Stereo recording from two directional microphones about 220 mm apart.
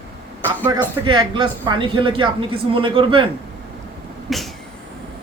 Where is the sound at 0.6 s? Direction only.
20° right (ahead or behind).